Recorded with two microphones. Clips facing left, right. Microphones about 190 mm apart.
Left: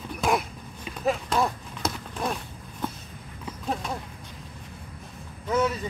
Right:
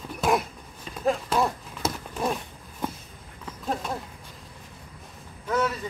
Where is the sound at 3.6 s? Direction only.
Centre (ahead or behind).